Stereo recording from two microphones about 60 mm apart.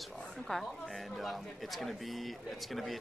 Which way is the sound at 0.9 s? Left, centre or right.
Centre.